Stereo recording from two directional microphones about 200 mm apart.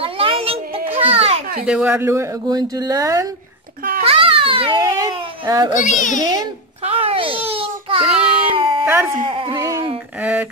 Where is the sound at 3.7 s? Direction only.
45° right (ahead or behind).